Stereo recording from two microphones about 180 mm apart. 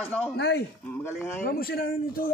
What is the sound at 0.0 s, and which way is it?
Speech, 5° left (ahead or behind).